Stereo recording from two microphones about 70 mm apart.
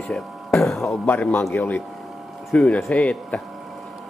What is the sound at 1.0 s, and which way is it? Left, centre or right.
Speech, left.